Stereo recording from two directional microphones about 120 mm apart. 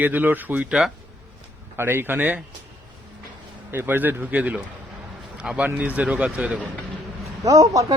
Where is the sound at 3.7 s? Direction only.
15° right (ahead or behind).